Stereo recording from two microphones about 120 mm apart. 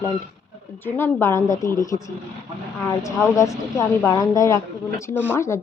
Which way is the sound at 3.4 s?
25° left (ahead or behind).